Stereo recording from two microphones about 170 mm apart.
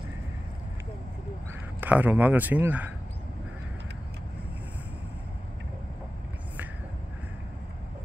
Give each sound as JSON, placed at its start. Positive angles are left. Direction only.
{"t": 1.8, "sound": "a man's voice", "side_deg": -10}